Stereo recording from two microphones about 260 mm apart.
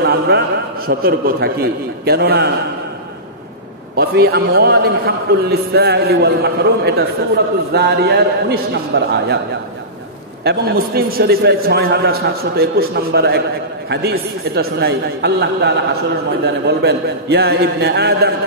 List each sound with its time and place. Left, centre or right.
0.0 s a man's voice: right
3.9 s a man's voice: right
10.4 s a man's voice: right